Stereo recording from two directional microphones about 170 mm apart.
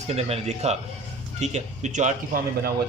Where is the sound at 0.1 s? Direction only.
35° right (ahead or behind).